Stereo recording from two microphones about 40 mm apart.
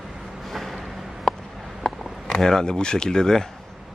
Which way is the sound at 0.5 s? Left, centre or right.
Centre.